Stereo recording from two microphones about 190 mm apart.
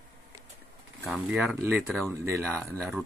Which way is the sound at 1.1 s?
5° right (ahead or behind).